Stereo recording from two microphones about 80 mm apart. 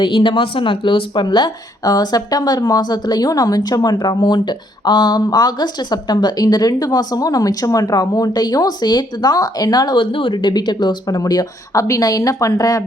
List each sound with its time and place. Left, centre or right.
0.0 s speech: left